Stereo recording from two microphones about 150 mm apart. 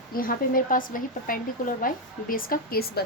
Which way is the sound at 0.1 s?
70° left (ahead or behind).